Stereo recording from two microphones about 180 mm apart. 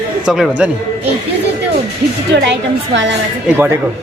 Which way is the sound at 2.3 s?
75° right (ahead or behind).